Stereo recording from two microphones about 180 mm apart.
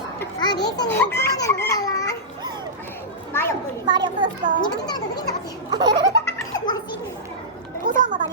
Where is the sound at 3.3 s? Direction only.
15° left (ahead or behind).